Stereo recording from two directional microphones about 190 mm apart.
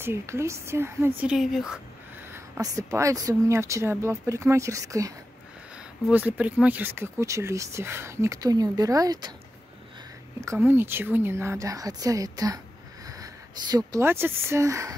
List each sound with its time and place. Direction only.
0.0 s speech: 15° right (ahead or behind)
2.3 s speech: 15° right (ahead or behind)
10.4 s a woman's voice: 15° right (ahead or behind)